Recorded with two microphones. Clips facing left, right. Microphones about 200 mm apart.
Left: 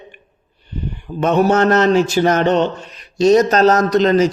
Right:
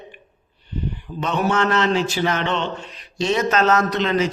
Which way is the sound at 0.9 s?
50° left (ahead or behind).